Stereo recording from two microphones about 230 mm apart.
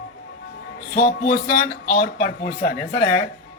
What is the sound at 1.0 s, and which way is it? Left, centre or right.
Speech, left.